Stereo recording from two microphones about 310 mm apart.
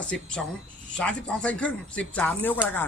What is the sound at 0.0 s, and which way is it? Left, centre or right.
Speech, centre.